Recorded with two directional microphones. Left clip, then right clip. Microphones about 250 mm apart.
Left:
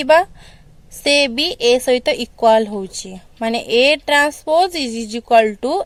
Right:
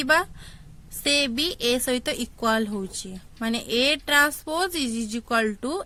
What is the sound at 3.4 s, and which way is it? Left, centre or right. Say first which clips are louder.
Speech: left 9 dB; centre.